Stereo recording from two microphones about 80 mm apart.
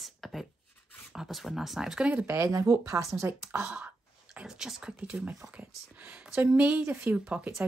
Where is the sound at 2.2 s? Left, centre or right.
Right.